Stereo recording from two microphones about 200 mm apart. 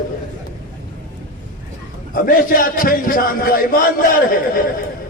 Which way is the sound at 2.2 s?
45° left (ahead or behind).